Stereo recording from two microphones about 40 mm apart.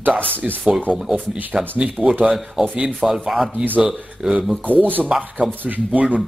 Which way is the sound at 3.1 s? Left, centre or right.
Centre.